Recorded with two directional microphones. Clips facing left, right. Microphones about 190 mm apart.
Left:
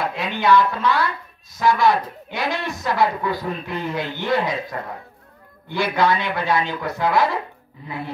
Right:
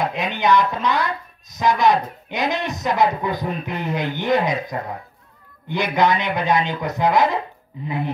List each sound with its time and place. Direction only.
0.0 s speech: 20° right (ahead or behind)